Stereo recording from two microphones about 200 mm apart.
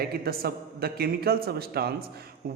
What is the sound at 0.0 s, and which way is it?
A man's voice, 50° right (ahead or behind).